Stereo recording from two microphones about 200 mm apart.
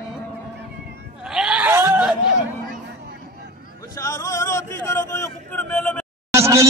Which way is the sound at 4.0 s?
15° left (ahead or behind).